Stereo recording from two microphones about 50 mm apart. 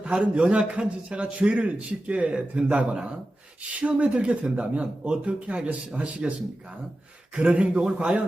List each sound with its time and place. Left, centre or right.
0.3 s speech: right
7.3 s speech: right